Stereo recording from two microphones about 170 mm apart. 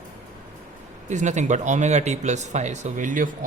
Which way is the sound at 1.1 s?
45° right (ahead or behind).